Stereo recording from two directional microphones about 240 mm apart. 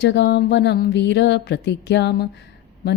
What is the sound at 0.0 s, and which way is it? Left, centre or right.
Speech, left.